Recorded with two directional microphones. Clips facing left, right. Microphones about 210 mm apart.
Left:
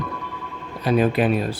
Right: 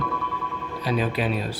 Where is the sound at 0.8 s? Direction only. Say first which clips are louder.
Left 6 dB; 55° left (ahead or behind).